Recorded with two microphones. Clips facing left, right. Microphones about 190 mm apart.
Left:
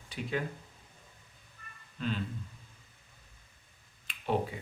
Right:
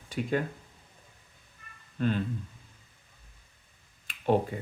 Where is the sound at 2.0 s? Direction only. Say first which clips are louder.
Right 6 dB; 50° right (ahead or behind).